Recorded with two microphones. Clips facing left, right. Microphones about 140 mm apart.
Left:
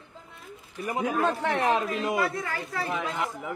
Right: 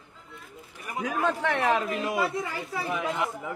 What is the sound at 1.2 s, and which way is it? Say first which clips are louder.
Speech: right 2 dB; 15° left (ahead or behind).